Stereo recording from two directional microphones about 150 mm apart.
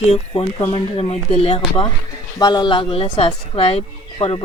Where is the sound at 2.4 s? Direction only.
25° left (ahead or behind).